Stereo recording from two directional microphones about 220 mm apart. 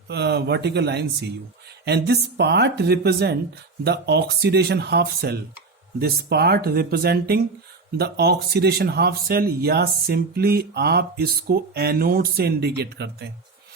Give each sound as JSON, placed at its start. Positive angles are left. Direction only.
{"t": 0.1, "sound": "speech", "side_deg": -50}